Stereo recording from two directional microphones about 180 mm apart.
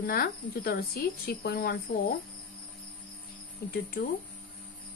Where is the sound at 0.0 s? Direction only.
55° left (ahead or behind).